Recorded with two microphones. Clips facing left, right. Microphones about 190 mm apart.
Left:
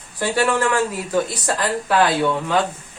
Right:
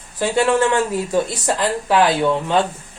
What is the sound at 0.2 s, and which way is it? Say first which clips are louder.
Speech: right 3 dB; 25° right (ahead or behind).